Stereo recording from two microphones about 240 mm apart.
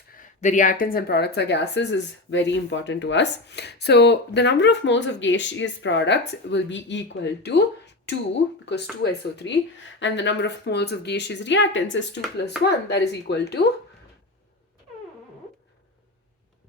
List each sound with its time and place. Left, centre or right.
0.2 s speech: left
9.0 s speech: left